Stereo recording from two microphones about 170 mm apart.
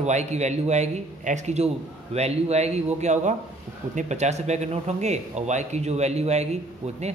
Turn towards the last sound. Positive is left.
turn(degrees=-40)  # may be behind; listen again after turning